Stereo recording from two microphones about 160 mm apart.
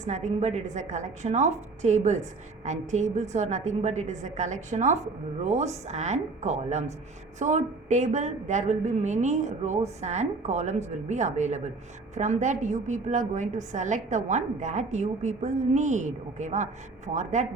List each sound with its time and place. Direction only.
0.0 s a woman's voice: 50° right (ahead or behind)